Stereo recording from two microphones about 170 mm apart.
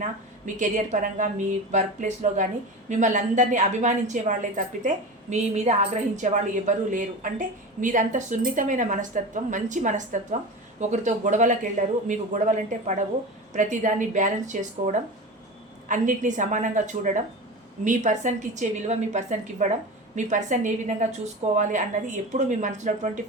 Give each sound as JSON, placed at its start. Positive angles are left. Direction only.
{"t": 0.4, "sound": "a woman's voice", "side_deg": -45}